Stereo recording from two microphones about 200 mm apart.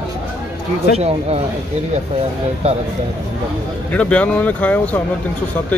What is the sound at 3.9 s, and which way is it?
Speech, 5° left (ahead or behind).